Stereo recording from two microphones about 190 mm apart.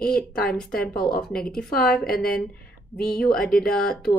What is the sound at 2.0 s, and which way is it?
Speech, 50° left (ahead or behind).